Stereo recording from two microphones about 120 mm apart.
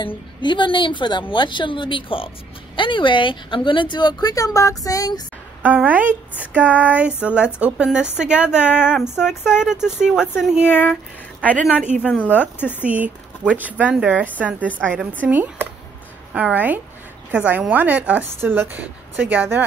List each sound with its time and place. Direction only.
0.0 s a woman's voice: 40° left (ahead or behind)
5.6 s speech: 15° right (ahead or behind)
12.1 s speech: 15° left (ahead or behind)
12.8 s speech: 15° right (ahead or behind)